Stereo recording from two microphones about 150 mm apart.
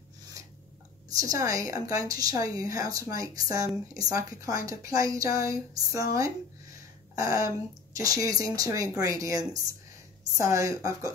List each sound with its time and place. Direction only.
1.2 s speech: 20° right (ahead or behind)
7.2 s speech: 20° right (ahead or behind)